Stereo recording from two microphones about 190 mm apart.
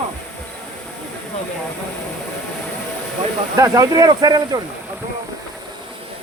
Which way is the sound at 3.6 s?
20° right (ahead or behind).